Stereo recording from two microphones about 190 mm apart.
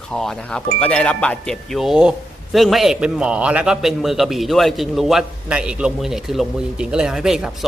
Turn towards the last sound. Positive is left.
turn(degrees=0)  # may be behind; listen again after turning